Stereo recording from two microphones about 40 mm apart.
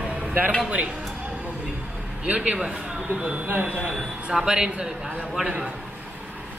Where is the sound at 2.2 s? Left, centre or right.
Right.